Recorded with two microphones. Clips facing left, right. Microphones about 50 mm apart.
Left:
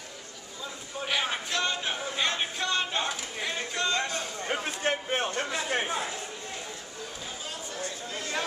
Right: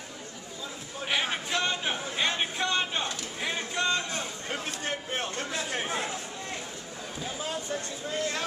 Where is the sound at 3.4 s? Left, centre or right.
Centre.